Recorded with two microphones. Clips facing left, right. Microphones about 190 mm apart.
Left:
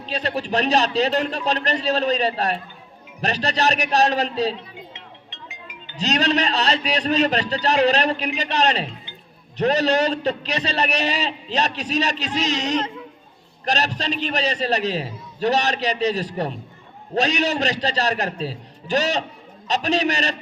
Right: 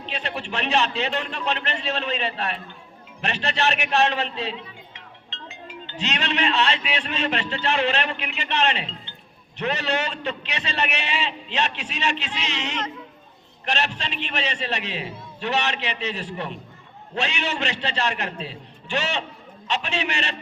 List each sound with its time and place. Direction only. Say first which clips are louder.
0.0 s a man's voice: left 5 dB; 40° left (ahead or behind)
4.9 s music: left 1 dB; 15° left (ahead or behind)
6.0 s a man's voice: left 5 dB; 40° left (ahead or behind)